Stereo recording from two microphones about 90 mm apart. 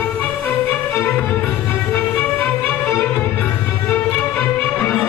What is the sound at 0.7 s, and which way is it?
Music, 5° left (ahead or behind).